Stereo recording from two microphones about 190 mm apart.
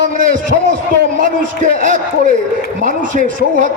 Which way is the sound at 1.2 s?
45° right (ahead or behind).